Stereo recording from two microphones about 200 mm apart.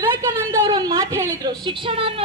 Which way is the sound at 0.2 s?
15° right (ahead or behind).